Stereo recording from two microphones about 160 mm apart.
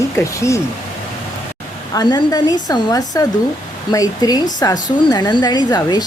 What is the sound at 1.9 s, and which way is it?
A woman's voice, 25° left (ahead or behind).